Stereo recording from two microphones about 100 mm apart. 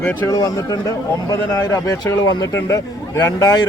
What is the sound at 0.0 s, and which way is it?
Speech, 15° left (ahead or behind).